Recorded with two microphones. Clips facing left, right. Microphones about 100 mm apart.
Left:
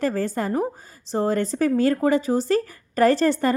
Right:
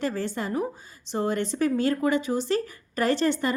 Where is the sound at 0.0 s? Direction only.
40° left (ahead or behind).